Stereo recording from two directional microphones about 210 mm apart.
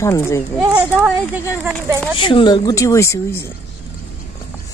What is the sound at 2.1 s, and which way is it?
Speech, 25° left (ahead or behind).